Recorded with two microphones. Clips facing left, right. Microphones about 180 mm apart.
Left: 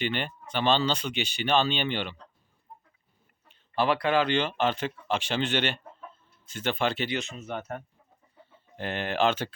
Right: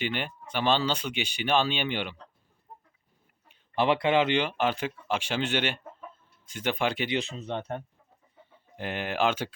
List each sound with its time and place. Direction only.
0.0 s speech: 10° right (ahead or behind)
3.5 s speech: 20° right (ahead or behind)
7.1 s speech: 30° right (ahead or behind)
8.4 s speech: 10° right (ahead or behind)